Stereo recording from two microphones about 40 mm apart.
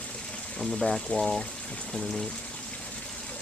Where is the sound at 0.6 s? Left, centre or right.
Centre.